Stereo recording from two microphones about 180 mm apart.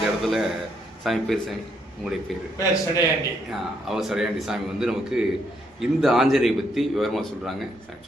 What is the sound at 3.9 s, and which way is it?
A man's voice, centre (ahead or behind).